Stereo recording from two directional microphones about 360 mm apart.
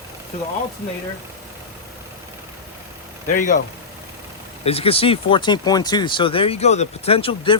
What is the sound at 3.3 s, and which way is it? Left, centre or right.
Speech, left.